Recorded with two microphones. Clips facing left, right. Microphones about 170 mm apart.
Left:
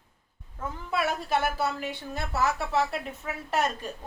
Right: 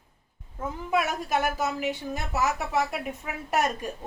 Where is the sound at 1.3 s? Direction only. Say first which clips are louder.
Even; 10° right (ahead or behind).